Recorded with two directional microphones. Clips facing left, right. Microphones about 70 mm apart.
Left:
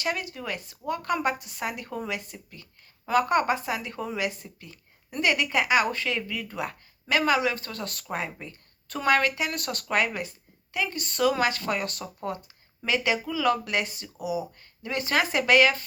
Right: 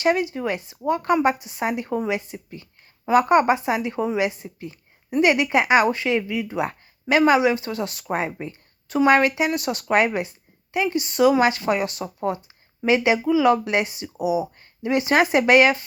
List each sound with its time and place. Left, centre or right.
0.0 s a woman's voice: right
8.0 s a woman's voice: right